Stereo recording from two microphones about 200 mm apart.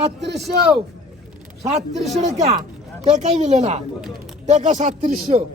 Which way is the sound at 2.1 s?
35° right (ahead or behind).